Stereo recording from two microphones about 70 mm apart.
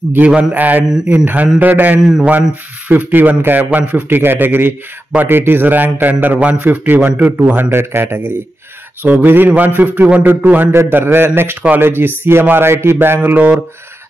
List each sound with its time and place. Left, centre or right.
0.3 s a man's voice: right